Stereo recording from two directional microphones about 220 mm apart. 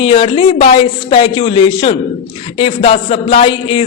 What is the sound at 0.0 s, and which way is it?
A man's voice, 25° left (ahead or behind).